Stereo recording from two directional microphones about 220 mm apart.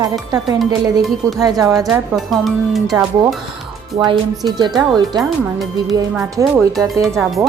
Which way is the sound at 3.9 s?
20° right (ahead or behind).